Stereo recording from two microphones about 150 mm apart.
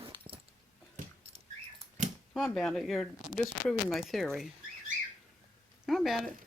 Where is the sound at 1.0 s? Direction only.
60° right (ahead or behind).